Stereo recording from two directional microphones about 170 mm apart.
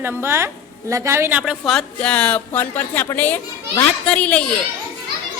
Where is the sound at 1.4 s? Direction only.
Centre (ahead or behind).